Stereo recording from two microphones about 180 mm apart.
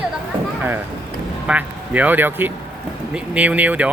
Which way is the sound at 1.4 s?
5° right (ahead or behind).